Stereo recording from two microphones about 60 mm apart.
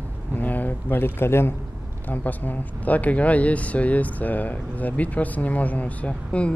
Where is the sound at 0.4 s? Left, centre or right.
Left.